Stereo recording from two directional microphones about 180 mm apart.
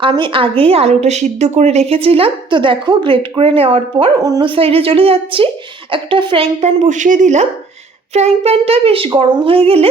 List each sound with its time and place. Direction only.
0.0 s a woman's voice: 30° right (ahead or behind)